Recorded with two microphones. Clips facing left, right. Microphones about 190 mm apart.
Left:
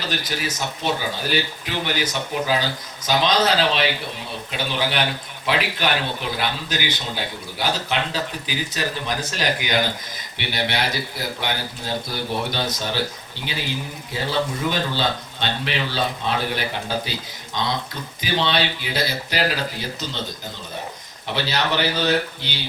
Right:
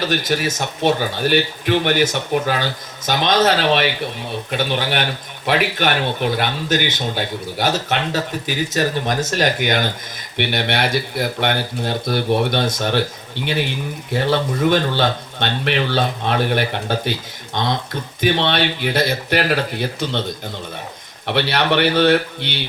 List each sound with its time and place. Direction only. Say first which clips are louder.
0.0 s speech: right 7 dB; 50° right (ahead or behind)
21.2 s speech: right 5 dB; 65° right (ahead or behind)